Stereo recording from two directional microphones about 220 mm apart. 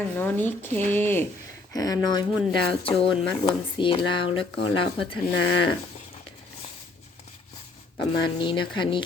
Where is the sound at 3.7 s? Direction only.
20° left (ahead or behind).